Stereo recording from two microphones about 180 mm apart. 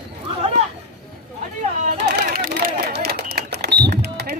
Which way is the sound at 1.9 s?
65° right (ahead or behind).